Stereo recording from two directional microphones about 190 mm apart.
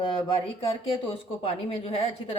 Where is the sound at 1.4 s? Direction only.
30° left (ahead or behind).